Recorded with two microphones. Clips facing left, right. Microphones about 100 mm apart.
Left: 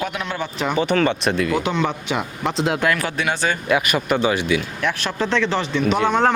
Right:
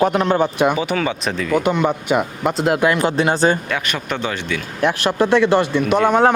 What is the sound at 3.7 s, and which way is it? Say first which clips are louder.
Speech: left 4 dB; 5° left (ahead or behind).